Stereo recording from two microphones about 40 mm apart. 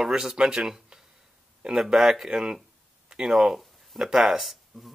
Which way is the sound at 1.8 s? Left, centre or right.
Centre.